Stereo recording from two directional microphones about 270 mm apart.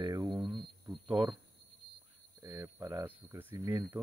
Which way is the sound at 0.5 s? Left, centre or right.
Centre.